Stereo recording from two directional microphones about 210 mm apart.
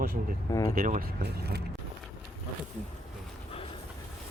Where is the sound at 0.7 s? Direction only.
40° right (ahead or behind).